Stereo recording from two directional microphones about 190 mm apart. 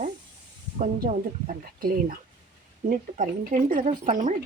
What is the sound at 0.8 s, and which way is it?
Speech, 45° right (ahead or behind).